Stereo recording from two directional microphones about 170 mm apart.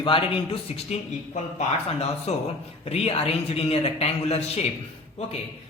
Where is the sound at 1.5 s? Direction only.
40° left (ahead or behind).